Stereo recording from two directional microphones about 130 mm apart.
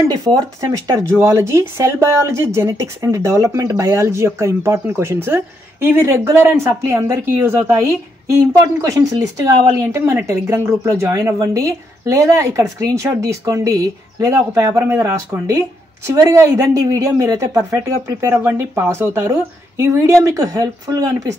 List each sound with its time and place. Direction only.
0.1 s speech: 30° right (ahead or behind)